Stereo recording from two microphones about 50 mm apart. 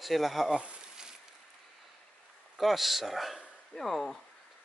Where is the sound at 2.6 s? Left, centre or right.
Centre.